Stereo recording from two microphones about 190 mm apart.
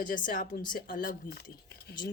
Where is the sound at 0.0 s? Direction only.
45° left (ahead or behind).